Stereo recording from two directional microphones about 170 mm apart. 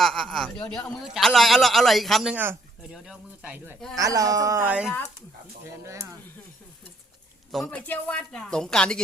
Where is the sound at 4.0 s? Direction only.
20° right (ahead or behind).